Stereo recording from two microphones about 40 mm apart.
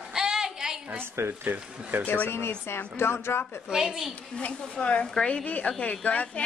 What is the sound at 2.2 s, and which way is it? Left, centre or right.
Speech, left.